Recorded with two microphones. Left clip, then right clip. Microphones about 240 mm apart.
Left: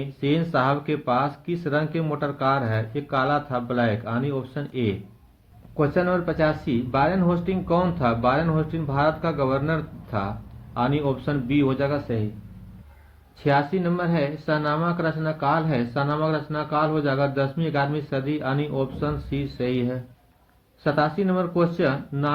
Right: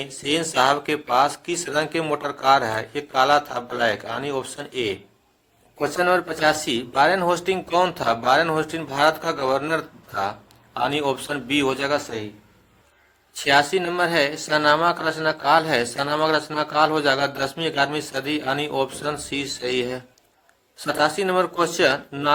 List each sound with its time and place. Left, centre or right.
0.0 s speech: right
10.9 s speech: right
13.3 s speech: right